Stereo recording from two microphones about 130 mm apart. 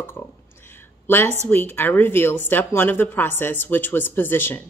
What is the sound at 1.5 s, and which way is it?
A woman's voice, 15° left (ahead or behind).